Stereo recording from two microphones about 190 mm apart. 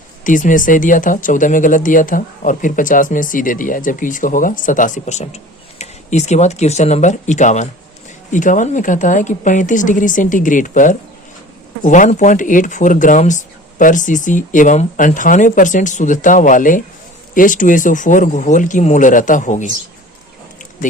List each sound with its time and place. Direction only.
0.3 s a woman's voice: 45° left (ahead or behind)